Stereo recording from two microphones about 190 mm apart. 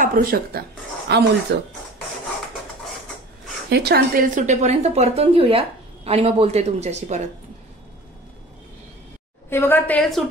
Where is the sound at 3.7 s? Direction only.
55° right (ahead or behind); by 7.2 s 35° right (ahead or behind).